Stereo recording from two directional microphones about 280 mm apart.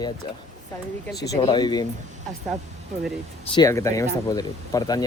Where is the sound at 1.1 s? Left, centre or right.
Left.